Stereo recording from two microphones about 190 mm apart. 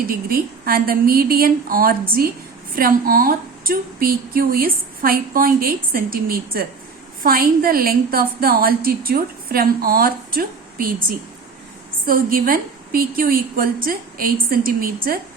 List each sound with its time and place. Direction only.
0.0 s a woman's voice: 50° right (ahead or behind)
12.0 s a woman's voice: 50° right (ahead or behind)